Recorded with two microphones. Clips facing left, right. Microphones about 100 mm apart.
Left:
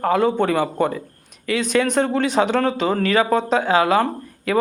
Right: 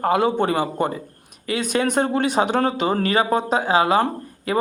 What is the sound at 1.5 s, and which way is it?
Speech, 45° right (ahead or behind).